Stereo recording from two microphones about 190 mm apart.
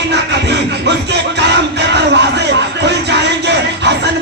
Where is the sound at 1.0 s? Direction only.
65° right (ahead or behind).